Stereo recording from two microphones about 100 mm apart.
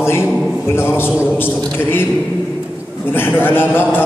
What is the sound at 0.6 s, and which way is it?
A man's voice, 25° left (ahead or behind).